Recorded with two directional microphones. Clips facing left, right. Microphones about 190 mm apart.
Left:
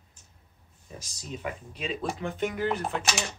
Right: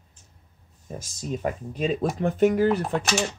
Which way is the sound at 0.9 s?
45° right (ahead or behind).